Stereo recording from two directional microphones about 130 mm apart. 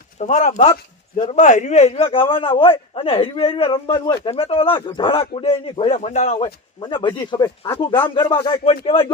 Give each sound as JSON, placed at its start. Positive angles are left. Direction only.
{"t": 0.2, "sound": "speech", "side_deg": 70}
{"t": 6.8, "sound": "speech", "side_deg": 35}